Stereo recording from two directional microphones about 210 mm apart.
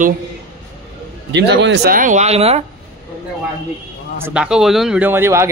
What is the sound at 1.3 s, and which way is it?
Speech, 55° right (ahead or behind).